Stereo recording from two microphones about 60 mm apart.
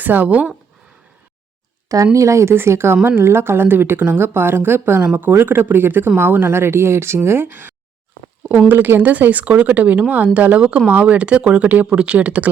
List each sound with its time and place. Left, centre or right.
0.0 s speech: right
2.1 s a woman's voice: right
8.7 s speech: right; by 11.7 s centre
11.7 s speech: right